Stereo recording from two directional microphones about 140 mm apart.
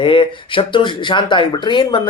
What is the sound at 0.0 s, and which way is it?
Speech, 40° left (ahead or behind).